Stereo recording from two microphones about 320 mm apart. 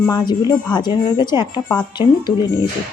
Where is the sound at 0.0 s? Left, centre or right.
Centre.